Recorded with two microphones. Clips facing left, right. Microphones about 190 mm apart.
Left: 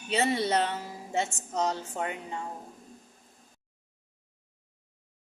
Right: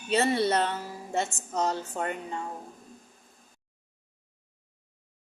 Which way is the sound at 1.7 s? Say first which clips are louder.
Right 2 dB; 50° right (ahead or behind).